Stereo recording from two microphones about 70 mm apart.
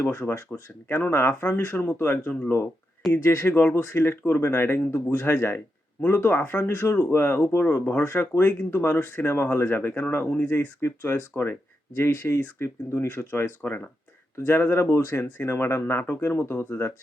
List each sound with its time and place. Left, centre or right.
0.0 s speech: left